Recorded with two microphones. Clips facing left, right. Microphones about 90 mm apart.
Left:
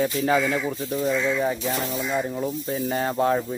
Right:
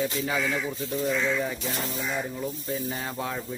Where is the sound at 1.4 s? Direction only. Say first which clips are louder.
Left 6 dB; 35° left (ahead or behind).